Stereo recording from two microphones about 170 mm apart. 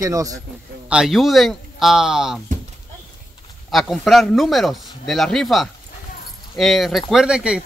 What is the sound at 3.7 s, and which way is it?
Speech, centre (ahead or behind).